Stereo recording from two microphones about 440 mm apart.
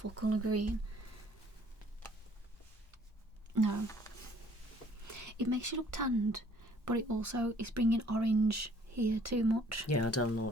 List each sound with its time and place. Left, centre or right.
0.0 s speech: right
3.5 s speech: right
5.0 s speech: right
9.9 s speech: left